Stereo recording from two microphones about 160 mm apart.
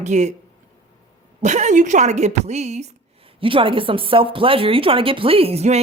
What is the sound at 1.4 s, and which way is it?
Speech, 50° right (ahead or behind).